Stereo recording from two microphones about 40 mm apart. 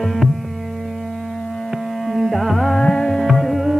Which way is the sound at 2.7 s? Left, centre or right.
Centre.